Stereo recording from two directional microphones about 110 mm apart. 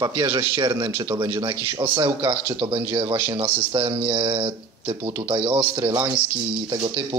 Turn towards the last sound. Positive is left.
turn(degrees=-50)  # may be behind; listen again after turning